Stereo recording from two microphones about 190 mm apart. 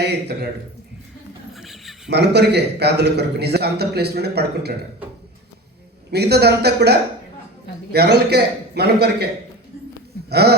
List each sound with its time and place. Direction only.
0.0 s a man's voice: 60° right (ahead or behind)
1.5 s a sound: centre (ahead or behind)
2.0 s a man's voice: 60° right (ahead or behind)
6.1 s a man's voice: 60° right (ahead or behind)
7.9 s a man's voice: 60° right (ahead or behind)
10.2 s a sound: 60° right (ahead or behind)